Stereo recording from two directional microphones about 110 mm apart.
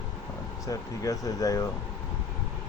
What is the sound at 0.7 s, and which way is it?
Speech, 30° left (ahead or behind).